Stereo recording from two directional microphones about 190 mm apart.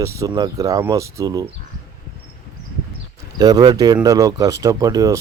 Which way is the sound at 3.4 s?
20° right (ahead or behind).